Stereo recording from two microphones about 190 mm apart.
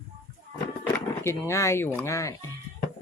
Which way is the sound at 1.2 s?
15° left (ahead or behind).